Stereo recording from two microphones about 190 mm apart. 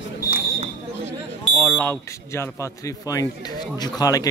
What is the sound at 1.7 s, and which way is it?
A man's voice, 10° left (ahead or behind).